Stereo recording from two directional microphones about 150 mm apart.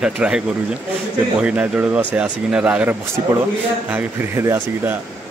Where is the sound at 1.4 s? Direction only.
10° right (ahead or behind).